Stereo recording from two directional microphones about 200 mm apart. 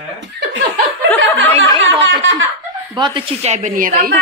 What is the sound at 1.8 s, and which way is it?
Speech, 70° right (ahead or behind).